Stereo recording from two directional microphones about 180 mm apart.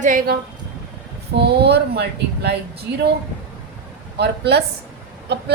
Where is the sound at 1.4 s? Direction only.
70° right (ahead or behind).